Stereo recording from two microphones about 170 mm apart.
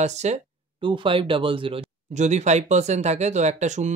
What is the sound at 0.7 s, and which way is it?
Speech, 30° right (ahead or behind).